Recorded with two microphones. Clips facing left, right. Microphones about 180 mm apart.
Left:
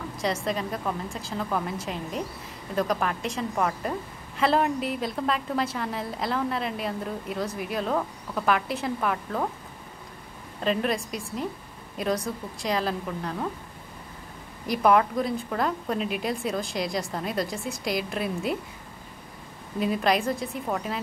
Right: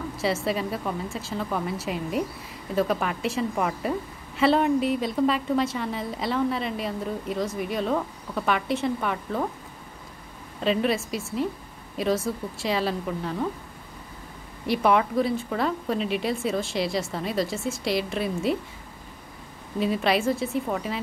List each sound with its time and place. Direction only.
0.2 s a woman's voice: 5° right (ahead or behind)
10.6 s a woman's voice: centre (ahead or behind)
14.7 s a woman's voice: centre (ahead or behind)
19.8 s a woman's voice: centre (ahead or behind)